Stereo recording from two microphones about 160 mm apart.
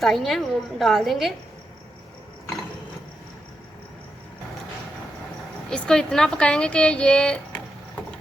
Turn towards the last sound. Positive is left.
turn(degrees=5)  # may be behind; listen again after turning